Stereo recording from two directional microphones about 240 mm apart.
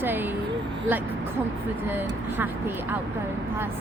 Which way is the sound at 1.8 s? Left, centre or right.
Centre.